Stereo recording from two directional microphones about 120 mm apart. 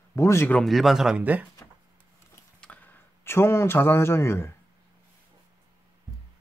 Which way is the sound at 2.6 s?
15° left (ahead or behind).